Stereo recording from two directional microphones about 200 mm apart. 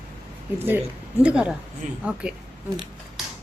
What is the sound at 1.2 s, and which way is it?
Speech, 5° right (ahead or behind).